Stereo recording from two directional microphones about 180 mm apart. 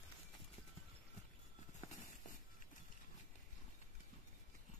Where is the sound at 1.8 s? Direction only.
20° left (ahead or behind).